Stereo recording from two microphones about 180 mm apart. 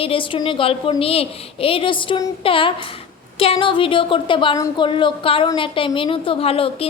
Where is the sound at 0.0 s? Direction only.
30° left (ahead or behind).